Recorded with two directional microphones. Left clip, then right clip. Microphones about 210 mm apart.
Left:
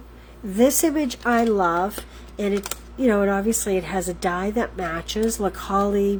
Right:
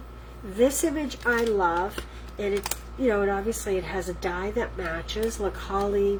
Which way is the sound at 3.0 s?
55° left (ahead or behind).